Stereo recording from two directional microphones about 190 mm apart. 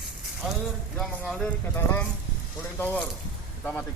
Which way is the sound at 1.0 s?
Centre (ahead or behind).